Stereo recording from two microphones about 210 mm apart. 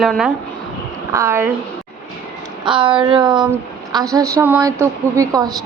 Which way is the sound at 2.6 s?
25° right (ahead or behind).